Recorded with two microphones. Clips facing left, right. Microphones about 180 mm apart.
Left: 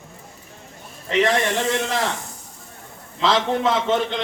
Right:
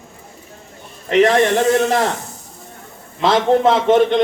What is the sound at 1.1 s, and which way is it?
Speech, 40° right (ahead or behind).